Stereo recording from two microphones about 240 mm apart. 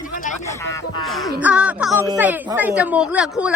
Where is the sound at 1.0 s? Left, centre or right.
Centre.